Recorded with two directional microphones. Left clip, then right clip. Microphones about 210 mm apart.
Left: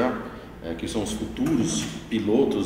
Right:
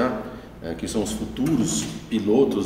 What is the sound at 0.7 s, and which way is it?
A man's voice, 35° right (ahead or behind).